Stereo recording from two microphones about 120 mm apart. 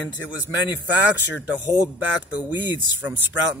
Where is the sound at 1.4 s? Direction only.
10° right (ahead or behind).